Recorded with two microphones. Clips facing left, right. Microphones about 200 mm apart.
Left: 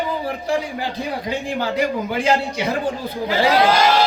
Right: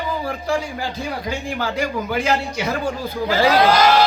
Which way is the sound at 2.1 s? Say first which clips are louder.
Left 1 dB; 30° left (ahead or behind).